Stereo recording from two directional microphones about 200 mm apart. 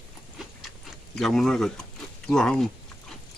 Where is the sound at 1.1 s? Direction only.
Centre (ahead or behind).